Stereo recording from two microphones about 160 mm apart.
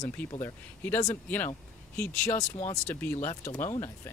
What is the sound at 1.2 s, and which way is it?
Speech, 10° left (ahead or behind).